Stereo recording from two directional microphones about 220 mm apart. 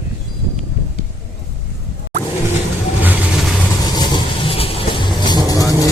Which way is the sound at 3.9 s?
20° left (ahead or behind).